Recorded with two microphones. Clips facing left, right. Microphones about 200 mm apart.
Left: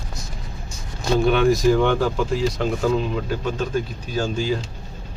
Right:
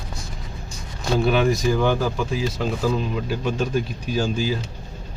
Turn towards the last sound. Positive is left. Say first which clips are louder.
# even
turn(degrees=-5)  # may be behind; listen again after turning